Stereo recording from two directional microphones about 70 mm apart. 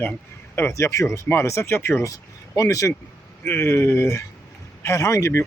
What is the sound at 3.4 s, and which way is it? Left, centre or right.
Speech, left.